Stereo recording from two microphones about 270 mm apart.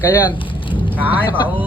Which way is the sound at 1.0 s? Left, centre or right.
Centre.